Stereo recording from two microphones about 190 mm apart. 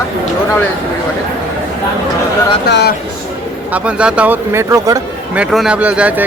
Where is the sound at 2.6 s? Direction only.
60° left (ahead or behind).